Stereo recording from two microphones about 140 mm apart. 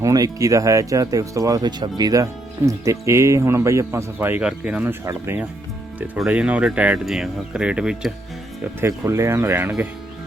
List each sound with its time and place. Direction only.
0.0 s speech: 25° right (ahead or behind); by 8.1 s 5° right (ahead or behind)
9.0 s speech: 20° right (ahead or behind)